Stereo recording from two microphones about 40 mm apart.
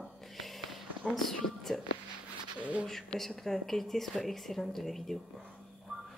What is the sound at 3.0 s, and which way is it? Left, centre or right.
Speech, centre.